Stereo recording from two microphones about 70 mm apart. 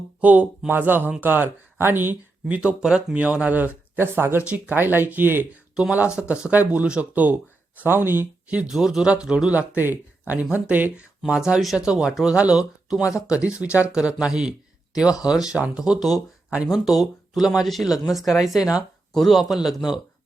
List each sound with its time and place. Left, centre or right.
0.2 s speech: centre
2.6 s speech: centre
5.7 s speech: centre
8.6 s speech: centre
9.5 s speech: right
11.2 s speech: centre
13.0 s speech: left
13.3 s speech: centre